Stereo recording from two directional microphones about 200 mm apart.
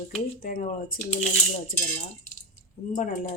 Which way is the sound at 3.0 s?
40° left (ahead or behind).